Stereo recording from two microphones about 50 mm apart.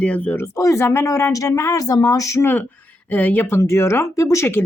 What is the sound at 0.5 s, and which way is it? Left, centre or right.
Speech, left.